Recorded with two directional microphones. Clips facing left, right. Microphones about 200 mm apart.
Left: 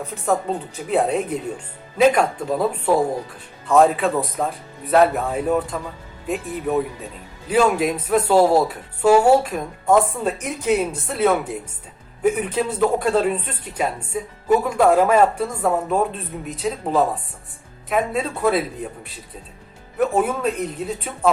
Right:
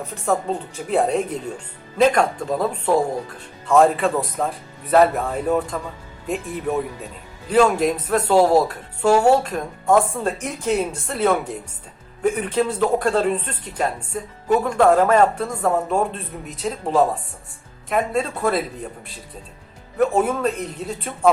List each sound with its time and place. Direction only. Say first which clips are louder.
0.9 s speech: even; centre (ahead or behind)
20.0 s speech: right 1 dB; 5° left (ahead or behind)